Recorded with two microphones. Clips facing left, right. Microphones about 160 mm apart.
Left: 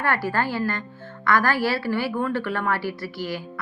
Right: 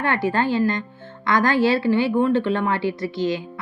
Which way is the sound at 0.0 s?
20° right (ahead or behind).